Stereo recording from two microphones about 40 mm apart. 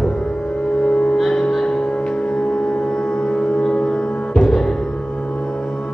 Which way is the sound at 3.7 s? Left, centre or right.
Centre.